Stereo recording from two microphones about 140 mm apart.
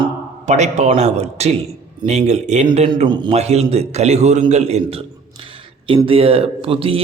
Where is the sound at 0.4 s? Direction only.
55° right (ahead or behind).